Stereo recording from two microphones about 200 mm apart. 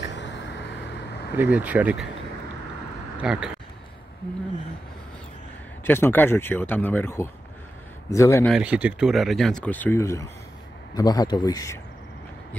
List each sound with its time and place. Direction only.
0.0 s vehicle: 60° left (ahead or behind)
1.3 s speech: 10° right (ahead or behind)
3.2 s speech: 5° right (ahead or behind)
5.9 s speech: 10° left (ahead or behind)
8.5 s speech: 5° right (ahead or behind); by 11.8 s 15° left (ahead or behind)